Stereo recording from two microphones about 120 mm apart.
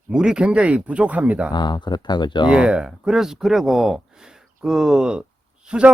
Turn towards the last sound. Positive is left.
turn(degrees=-10)  # may be behind; listen again after turning